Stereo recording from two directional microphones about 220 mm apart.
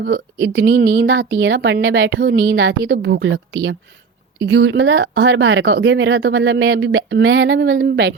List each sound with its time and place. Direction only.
0.0 s a woman's voice: 50° right (ahead or behind)